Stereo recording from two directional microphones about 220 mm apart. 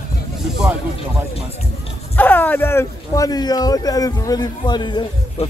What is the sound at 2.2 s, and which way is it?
Speech, 10° left (ahead or behind).